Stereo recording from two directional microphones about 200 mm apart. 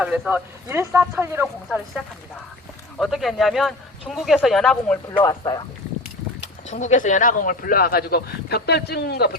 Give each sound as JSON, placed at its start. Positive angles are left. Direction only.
{"t": 0.0, "sound": "speech", "side_deg": -5}
{"t": 3.0, "sound": "speech", "side_deg": 0}
{"t": 5.2, "sound": "speech", "side_deg": 20}
{"t": 6.4, "sound": "speech", "side_deg": 35}